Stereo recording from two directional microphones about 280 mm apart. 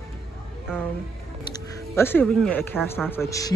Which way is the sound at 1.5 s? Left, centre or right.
Centre.